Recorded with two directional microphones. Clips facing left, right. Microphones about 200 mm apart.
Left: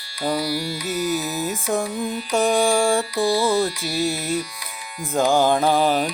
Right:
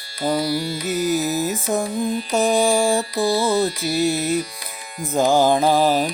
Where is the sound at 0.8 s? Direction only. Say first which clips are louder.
Right 4 dB; 45° right (ahead or behind).